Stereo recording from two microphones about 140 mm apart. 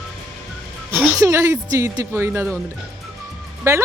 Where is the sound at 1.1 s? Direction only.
20° right (ahead or behind).